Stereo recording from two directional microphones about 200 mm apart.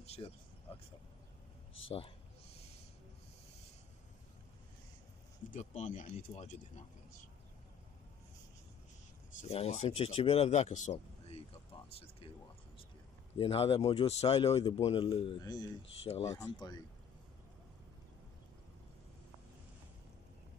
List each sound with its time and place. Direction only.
0.0 s vehicle: 30° left (ahead or behind)
1.9 s a sound: 30° left (ahead or behind)
5.5 s speech: 35° left (ahead or behind)
9.4 s speech: 30° left (ahead or behind)
13.4 s a man's voice: 30° left (ahead or behind)
16.0 s a man's voice: 30° left (ahead or behind)
16.3 s a man's voice: 20° left (ahead or behind)